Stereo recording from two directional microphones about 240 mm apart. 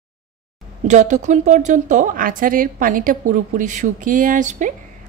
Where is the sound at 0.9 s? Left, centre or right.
Right.